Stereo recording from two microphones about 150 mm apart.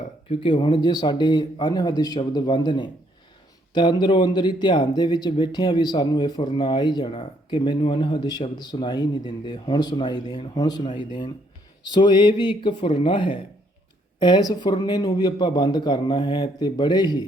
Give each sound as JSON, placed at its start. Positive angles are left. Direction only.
{"t": 0.3, "sound": "speech", "side_deg": 35}